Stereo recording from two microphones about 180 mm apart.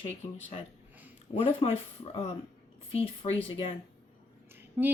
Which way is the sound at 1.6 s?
25° left (ahead or behind).